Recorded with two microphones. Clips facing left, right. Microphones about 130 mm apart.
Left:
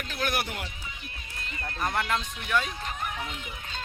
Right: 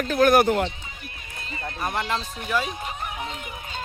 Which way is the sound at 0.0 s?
45° right (ahead or behind).